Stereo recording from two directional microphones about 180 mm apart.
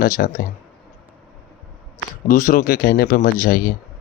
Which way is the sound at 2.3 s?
45° left (ahead or behind).